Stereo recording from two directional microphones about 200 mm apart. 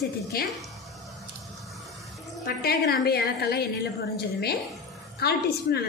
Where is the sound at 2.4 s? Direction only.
50° left (ahead or behind).